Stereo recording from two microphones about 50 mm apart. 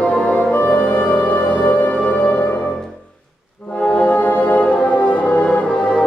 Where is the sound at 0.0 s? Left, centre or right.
Left.